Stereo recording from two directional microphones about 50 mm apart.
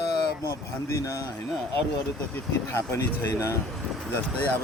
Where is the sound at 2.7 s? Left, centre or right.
Left.